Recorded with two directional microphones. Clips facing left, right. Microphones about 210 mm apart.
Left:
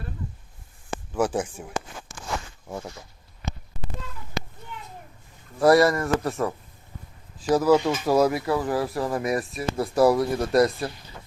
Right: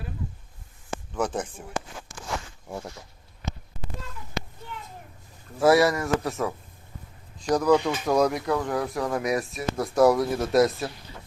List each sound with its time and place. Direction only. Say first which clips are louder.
1.1 s speech: left 4 dB; 10° left (ahead or behind)
2.6 s speech: left 1 dB; centre (ahead or behind)
5.5 s speech: left 2 dB; centre (ahead or behind)